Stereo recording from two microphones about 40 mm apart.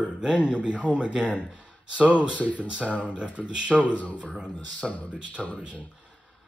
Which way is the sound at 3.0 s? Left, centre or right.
Right.